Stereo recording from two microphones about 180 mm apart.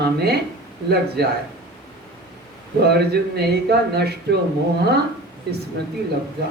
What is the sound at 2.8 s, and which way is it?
A man's voice, 65° right (ahead or behind).